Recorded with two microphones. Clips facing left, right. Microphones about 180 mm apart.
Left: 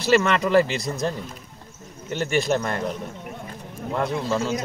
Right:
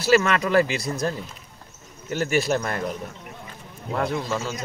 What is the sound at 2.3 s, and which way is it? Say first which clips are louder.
Speech: left 1 dB; 5° right (ahead or behind).